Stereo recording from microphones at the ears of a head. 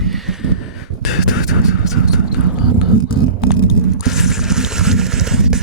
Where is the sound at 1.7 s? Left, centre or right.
Right.